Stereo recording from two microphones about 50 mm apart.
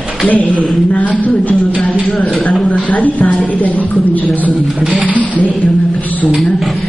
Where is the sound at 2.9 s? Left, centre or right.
Left.